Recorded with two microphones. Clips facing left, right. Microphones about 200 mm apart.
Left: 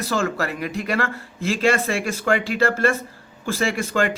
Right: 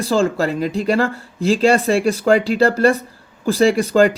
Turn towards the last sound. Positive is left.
turn(degrees=-35)  # may be behind; listen again after turning